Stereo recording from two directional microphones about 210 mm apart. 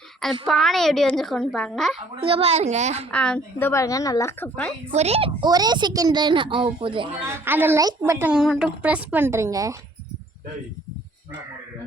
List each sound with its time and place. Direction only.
0.4 s a child's voice: centre (ahead or behind)
2.2 s a woman's voice: 25° right (ahead or behind)
3.1 s speech: 5° left (ahead or behind)
4.9 s a woman's voice: 30° right (ahead or behind)
7.3 s a woman's voice: 10° right (ahead or behind)